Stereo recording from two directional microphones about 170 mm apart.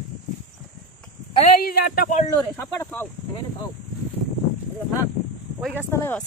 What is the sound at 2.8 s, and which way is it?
Speech, 10° left (ahead or behind).